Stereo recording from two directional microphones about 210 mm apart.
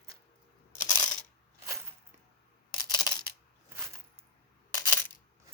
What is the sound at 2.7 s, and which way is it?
Camera, 20° left (ahead or behind).